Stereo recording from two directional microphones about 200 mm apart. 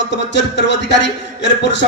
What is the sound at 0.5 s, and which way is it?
Speech, 60° left (ahead or behind).